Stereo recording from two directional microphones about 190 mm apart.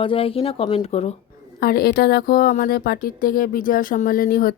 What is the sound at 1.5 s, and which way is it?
A woman's voice, 55° left (ahead or behind).